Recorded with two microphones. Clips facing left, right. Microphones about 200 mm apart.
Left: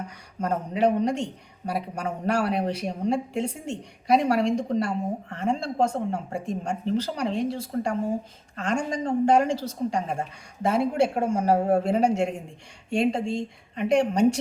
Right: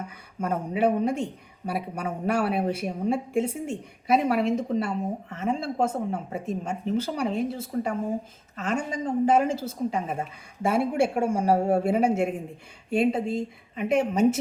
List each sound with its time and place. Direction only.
0.4 s a man's voice: 5° right (ahead or behind)